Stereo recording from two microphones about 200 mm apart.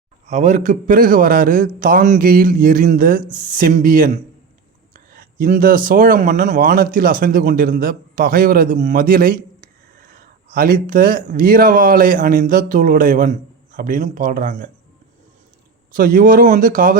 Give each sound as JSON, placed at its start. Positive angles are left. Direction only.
{"t": 0.3, "sound": "speech", "side_deg": -35}
{"t": 16.0, "sound": "speech", "side_deg": -45}